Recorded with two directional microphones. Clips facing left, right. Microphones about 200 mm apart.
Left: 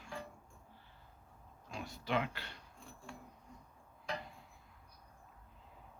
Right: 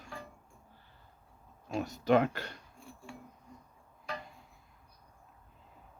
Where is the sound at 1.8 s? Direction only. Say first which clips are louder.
Right 10 dB; 45° right (ahead or behind).